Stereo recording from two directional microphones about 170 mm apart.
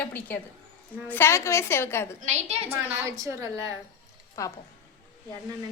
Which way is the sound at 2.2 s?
40° right (ahead or behind).